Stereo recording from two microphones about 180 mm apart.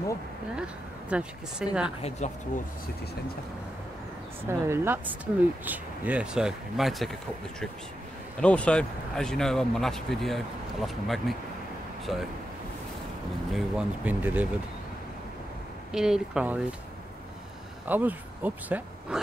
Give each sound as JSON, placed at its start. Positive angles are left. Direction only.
{"t": 0.6, "sound": "speech", "side_deg": -5}
{"t": 2.0, "sound": "speech", "side_deg": 35}
{"t": 4.5, "sound": "speech", "side_deg": -15}
{"t": 8.4, "sound": "speech", "side_deg": 5}
{"t": 13.5, "sound": "speech", "side_deg": -5}
{"t": 15.9, "sound": "speech", "side_deg": -5}
{"t": 17.8, "sound": "speech", "side_deg": -10}